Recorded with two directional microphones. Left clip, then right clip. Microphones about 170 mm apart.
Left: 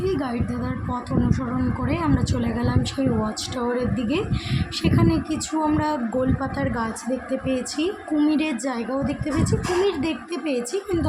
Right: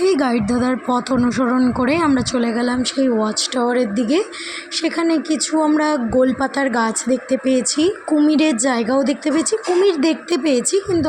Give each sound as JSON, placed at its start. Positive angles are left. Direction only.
{"t": 0.0, "sound": "speech", "side_deg": -45}